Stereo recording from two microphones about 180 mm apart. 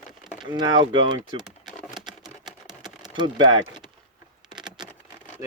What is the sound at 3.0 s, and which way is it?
Speech, 25° right (ahead or behind).